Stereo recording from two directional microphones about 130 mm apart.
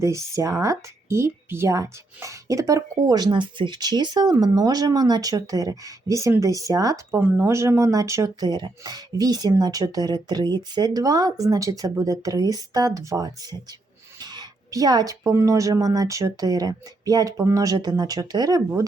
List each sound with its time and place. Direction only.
0.0 s speech: 25° right (ahead or behind)